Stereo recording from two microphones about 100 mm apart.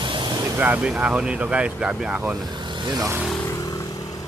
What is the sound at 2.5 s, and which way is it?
Vehicle, 50° right (ahead or behind).